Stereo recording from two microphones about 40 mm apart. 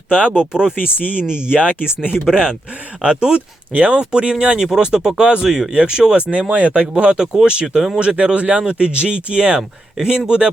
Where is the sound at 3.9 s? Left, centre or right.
Right.